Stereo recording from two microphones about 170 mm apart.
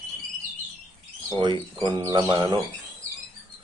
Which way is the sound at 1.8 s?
25° right (ahead or behind).